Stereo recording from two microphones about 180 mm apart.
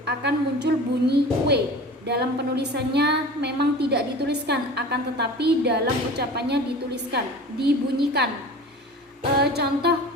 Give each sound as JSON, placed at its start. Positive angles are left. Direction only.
{"t": 0.0, "sound": "a woman's voice", "side_deg": -70}
{"t": 9.4, "sound": "a woman's voice", "side_deg": -65}